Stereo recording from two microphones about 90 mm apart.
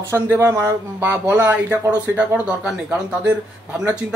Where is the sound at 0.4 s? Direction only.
30° right (ahead or behind).